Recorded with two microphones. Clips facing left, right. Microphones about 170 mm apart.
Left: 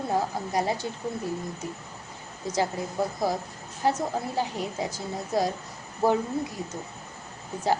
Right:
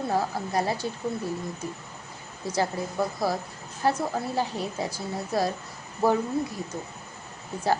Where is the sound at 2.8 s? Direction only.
15° left (ahead or behind).